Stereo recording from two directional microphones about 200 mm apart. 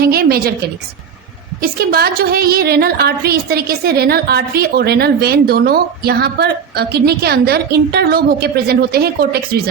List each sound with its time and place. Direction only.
0.0 s a woman's voice: 50° right (ahead or behind)
1.6 s a woman's voice: 50° right (ahead or behind)